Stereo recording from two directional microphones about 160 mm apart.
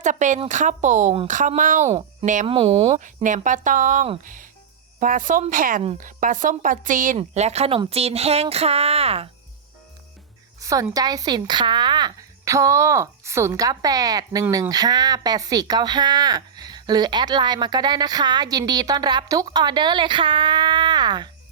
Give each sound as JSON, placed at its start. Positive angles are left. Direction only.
{"t": 0.0, "sound": "speech", "side_deg": -50}
{"t": 2.5, "sound": "speech", "side_deg": -35}
{"t": 3.0, "sound": "a woman's voice", "side_deg": -50}
{"t": 7.2, "sound": "speech", "side_deg": -45}
{"t": 10.6, "sound": "a sound", "side_deg": -20}
{"t": 10.9, "sound": "speech", "side_deg": -25}